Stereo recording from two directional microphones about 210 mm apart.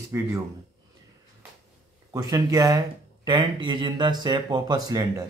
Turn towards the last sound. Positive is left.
turn(degrees=-15)  # may be behind; listen again after turning